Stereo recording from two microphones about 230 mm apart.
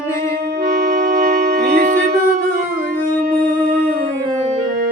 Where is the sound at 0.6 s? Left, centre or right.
Right.